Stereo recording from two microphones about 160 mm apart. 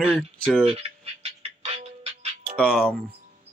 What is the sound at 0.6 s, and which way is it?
Music, 40° right (ahead or behind).